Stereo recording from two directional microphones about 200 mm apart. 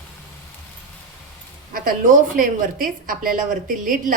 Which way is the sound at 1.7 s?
45° right (ahead or behind).